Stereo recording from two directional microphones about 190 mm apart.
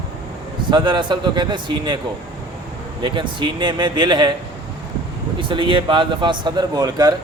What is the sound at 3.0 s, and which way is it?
Speech, 25° right (ahead or behind).